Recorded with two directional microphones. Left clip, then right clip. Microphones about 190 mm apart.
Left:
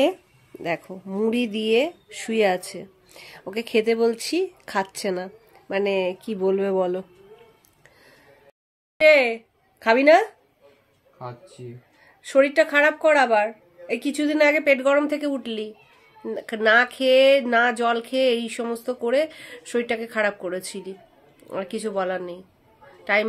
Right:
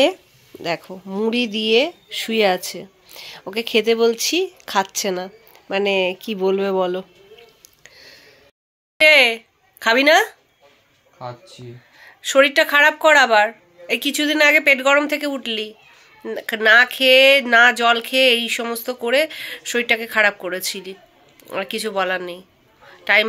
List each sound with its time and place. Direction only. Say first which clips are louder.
0.6 s speech: right 3 dB; centre (ahead or behind)
0.9 s speech: right 3 dB; 10° right (ahead or behind)
9.0 s speech: right 4 dB; 10° left (ahead or behind)
11.2 s speech: right 4 dB; 40° right (ahead or behind)
12.0 s speech: right 4 dB; 10° left (ahead or behind)